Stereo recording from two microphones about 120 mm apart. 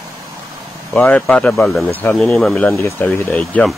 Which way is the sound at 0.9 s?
10° left (ahead or behind).